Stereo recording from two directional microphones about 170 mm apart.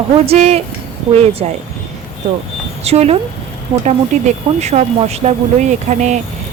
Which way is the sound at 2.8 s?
40° right (ahead or behind).